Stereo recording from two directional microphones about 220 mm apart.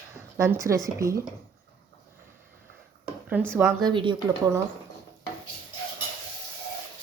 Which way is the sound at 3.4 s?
5° right (ahead or behind).